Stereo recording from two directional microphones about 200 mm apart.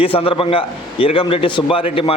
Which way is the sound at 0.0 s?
30° left (ahead or behind).